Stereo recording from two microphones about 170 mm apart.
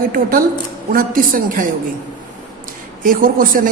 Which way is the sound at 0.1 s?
55° right (ahead or behind).